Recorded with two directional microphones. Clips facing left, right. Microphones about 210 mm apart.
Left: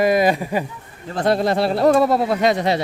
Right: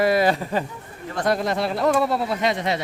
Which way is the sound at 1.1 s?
30° left (ahead or behind).